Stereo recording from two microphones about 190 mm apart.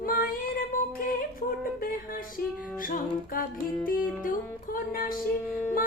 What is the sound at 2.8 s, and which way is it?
Music, 45° left (ahead or behind).